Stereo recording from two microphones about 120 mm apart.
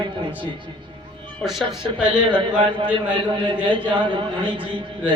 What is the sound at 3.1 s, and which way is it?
A man's voice, 40° right (ahead or behind).